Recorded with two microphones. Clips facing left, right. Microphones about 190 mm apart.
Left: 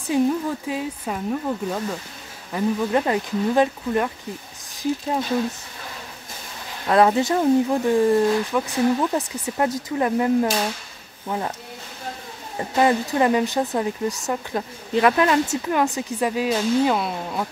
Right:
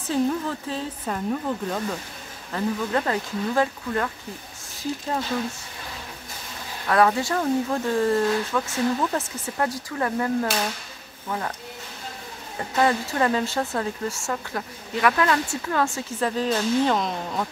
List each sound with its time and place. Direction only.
0.0 s speech: 15° left (ahead or behind)
2.5 s speech: 20° left (ahead or behind)
6.9 s speech: 25° left (ahead or behind)
12.5 s speech: 20° left (ahead or behind)